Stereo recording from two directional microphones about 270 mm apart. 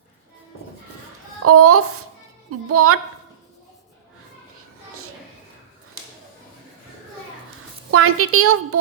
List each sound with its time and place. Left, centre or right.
1.5 s a child's voice: right
7.9 s a woman's voice: right